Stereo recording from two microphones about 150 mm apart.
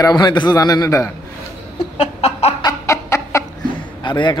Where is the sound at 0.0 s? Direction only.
30° left (ahead or behind).